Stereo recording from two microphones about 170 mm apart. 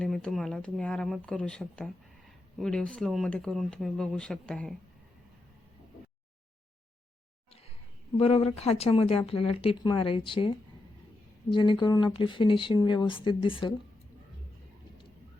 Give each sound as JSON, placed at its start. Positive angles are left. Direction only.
{"t": 0.0, "sound": "speech", "side_deg": 5}
{"t": 8.2, "sound": "speech", "side_deg": 35}